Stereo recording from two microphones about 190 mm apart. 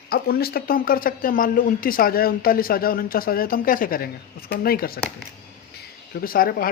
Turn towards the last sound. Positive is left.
turn(degrees=50)  # may be behind; listen again after turning